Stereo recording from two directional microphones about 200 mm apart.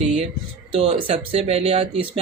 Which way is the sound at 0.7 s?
30° right (ahead or behind).